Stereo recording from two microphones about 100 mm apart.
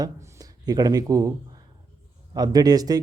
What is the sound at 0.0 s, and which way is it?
Speech, 40° right (ahead or behind).